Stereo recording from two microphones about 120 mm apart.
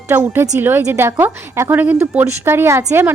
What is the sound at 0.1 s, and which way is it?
A woman's voice, 20° right (ahead or behind).